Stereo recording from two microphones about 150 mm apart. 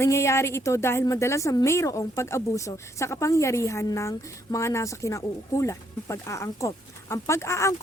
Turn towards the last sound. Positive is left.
turn(degrees=20)  # may be behind; listen again after turning